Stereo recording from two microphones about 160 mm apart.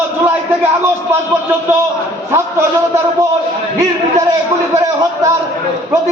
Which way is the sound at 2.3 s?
15° right (ahead or behind).